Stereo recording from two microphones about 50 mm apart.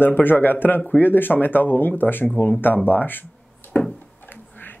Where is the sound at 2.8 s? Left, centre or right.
Left.